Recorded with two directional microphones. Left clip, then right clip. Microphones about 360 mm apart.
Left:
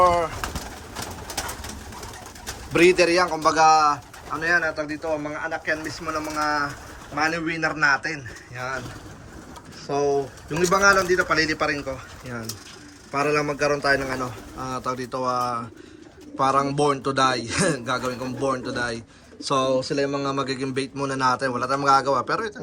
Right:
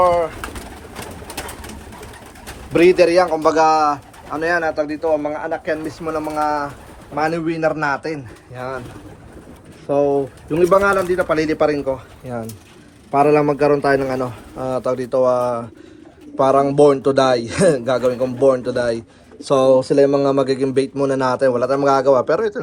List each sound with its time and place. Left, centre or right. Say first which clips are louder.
0.0 s pigeon: right 4 dB; centre
2.7 s a man's voice: right 5 dB; centre
9.8 s a man's voice: right 6 dB; right; by 22.6 s centre